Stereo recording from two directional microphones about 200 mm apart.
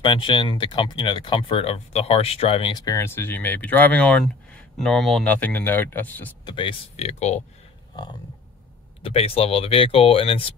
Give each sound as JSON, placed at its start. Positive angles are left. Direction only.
{"t": 0.0, "sound": "speech", "side_deg": 25}
{"t": 6.4, "sound": "speech", "side_deg": 25}
{"t": 9.0, "sound": "speech", "side_deg": 30}